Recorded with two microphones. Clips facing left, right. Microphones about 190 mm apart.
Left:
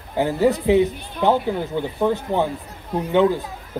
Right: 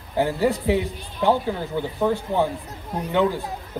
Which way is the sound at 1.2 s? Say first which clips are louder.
Left 1 dB; 60° left (ahead or behind).